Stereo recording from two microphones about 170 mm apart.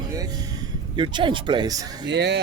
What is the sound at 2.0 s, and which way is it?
Speech, 90° right.